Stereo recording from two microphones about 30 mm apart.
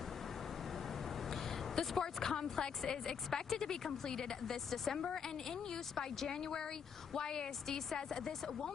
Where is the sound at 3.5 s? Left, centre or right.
Centre.